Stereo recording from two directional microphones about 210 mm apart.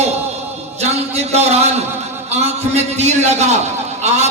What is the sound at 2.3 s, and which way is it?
A man's voice, 30° right (ahead or behind).